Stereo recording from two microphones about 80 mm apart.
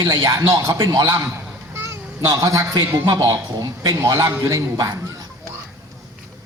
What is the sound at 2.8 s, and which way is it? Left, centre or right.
A man's voice, right.